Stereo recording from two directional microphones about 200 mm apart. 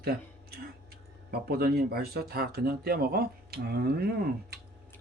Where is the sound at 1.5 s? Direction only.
50° right (ahead or behind).